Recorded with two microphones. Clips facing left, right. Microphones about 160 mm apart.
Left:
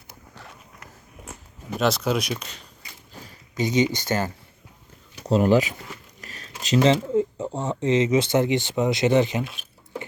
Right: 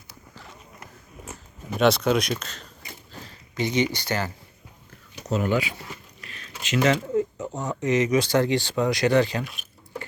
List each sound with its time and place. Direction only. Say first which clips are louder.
1.8 s speech: right 3 dB; 5° left (ahead or behind)
4.0 s speech: left 3 dB; 45° left (ahead or behind)
5.2 s speech: left 6 dB; 35° left (ahead or behind)
6.2 s a sound: left 3 dB; 40° left (ahead or behind)
6.7 s speech: left 3 dB; 25° left (ahead or behind)